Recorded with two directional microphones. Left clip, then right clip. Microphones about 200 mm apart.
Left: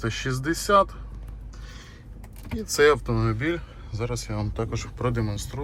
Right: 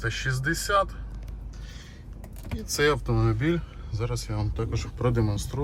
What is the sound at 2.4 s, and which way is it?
Speech, centre (ahead or behind).